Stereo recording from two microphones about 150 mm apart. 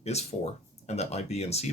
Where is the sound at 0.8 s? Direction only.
45° left (ahead or behind).